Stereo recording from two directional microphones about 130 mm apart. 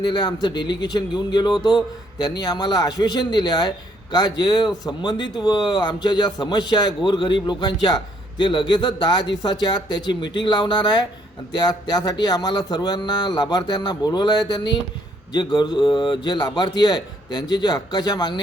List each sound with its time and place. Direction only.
0.0 s speech: 35° left (ahead or behind)